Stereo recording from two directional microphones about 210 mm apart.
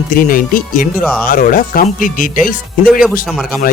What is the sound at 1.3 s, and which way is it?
Speech, 40° left (ahead or behind).